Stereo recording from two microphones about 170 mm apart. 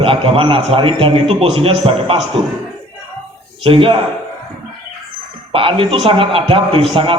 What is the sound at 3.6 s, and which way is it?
Speech, 30° right (ahead or behind).